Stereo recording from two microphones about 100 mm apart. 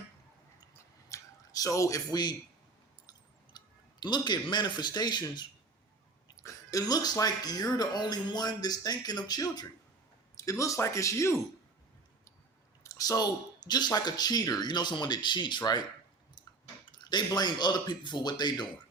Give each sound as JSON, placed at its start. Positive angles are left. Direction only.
{"t": 1.1, "sound": "a sound", "side_deg": 35}
{"t": 3.5, "sound": "clicking", "side_deg": 45}
{"t": 4.0, "sound": "speech", "side_deg": 45}
{"t": 6.3, "sound": "speech", "side_deg": 30}
{"t": 12.8, "sound": "speech", "side_deg": 35}
{"t": 16.8, "sound": "speech", "side_deg": 45}